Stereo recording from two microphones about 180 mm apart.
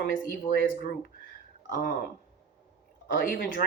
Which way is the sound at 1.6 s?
50° left (ahead or behind).